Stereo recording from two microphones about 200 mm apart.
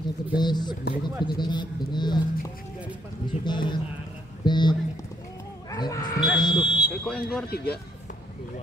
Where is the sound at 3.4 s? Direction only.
20° left (ahead or behind).